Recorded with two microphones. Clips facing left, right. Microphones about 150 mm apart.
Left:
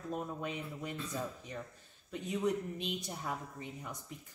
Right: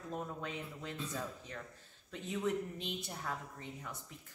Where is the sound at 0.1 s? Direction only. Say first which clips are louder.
Left 3 dB; 15° left (ahead or behind).